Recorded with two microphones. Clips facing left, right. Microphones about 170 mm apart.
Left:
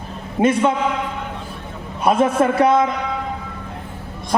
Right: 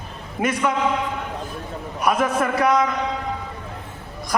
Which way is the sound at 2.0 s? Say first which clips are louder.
Left 5 dB; 25° left (ahead or behind).